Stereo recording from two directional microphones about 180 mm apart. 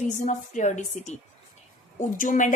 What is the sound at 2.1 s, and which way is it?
Speech, 45° left (ahead or behind).